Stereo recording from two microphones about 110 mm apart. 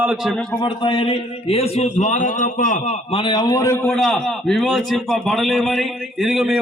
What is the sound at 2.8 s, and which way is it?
Speech, 60° left (ahead or behind).